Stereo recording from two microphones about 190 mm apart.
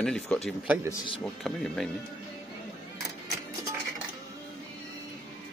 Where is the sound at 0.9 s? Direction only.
25° left (ahead or behind).